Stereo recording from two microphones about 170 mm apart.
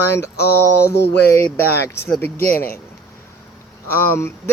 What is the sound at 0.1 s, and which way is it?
Speech, 15° left (ahead or behind).